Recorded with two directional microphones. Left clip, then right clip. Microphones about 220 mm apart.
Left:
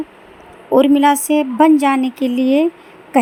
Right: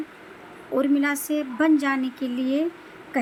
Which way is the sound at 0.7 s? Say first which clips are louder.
Left 11 dB; 30° left (ahead or behind).